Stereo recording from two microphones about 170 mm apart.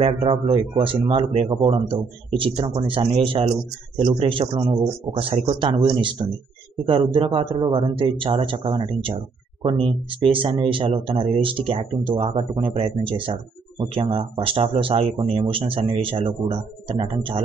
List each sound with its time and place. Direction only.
0.0 s speech: 35° right (ahead or behind)